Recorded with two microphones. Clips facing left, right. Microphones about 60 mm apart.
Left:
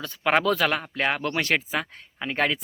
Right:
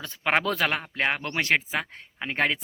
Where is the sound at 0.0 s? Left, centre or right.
Right.